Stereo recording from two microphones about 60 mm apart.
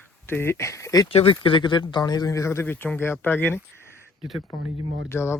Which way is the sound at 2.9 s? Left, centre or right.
Left.